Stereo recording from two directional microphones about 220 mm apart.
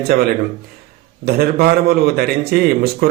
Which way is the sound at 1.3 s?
45° right (ahead or behind).